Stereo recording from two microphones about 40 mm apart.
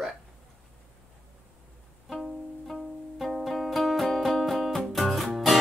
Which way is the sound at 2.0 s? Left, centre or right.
Centre.